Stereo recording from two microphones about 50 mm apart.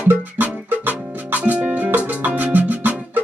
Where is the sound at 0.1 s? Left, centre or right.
Right.